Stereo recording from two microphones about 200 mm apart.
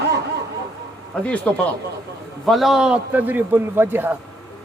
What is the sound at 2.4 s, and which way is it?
A man's voice, centre (ahead or behind).